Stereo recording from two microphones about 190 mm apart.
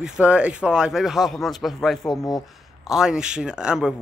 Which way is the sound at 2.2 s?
20° left (ahead or behind).